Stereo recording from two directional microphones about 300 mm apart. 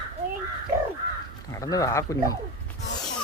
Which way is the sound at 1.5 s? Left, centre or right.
Centre.